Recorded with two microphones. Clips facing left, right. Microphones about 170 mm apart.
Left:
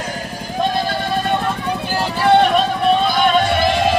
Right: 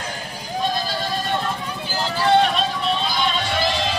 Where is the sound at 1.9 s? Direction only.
60° left (ahead or behind).